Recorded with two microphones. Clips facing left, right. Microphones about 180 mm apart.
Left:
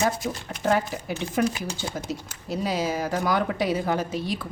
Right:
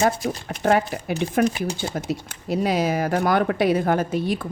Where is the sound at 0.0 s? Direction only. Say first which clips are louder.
Right 4 dB; 60° right (ahead or behind).